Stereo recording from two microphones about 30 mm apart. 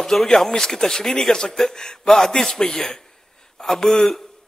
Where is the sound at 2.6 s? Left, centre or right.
Left.